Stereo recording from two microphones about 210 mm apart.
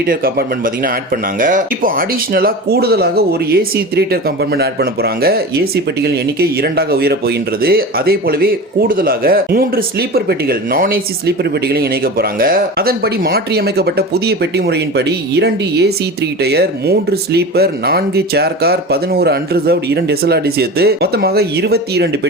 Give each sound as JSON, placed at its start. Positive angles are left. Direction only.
{"t": 0.0, "sound": "speech", "side_deg": -45}